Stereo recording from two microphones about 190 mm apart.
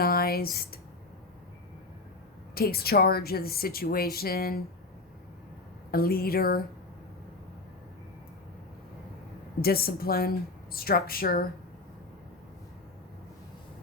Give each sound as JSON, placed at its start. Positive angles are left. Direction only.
{"t": 0.0, "sound": "speech", "side_deg": 50}
{"t": 2.6, "sound": "a woman's voice", "side_deg": 55}
{"t": 5.9, "sound": "a woman's voice", "side_deg": 50}
{"t": 9.6, "sound": "a woman's voice", "side_deg": 55}